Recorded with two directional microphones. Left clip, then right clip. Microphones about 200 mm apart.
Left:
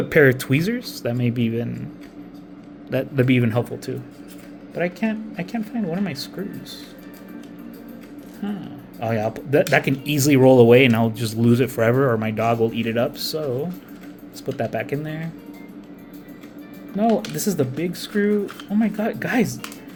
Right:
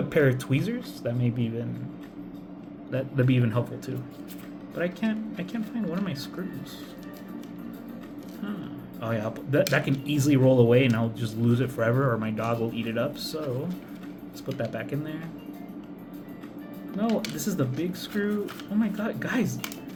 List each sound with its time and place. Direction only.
0.1 s speech: 40° left (ahead or behind)
2.9 s speech: 45° left (ahead or behind)
9.0 s speech: 35° left (ahead or behind)
14.6 s speech: 40° left (ahead or behind)
17.0 s speech: 40° left (ahead or behind)